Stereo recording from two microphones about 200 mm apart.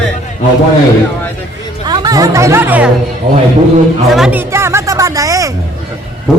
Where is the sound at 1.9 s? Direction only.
20° right (ahead or behind).